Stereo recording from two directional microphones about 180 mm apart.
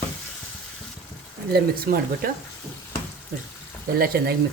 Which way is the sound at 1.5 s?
55° right (ahead or behind).